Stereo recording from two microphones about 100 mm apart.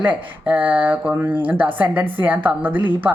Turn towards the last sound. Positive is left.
turn(degrees=-15)  # may be behind; listen again after turning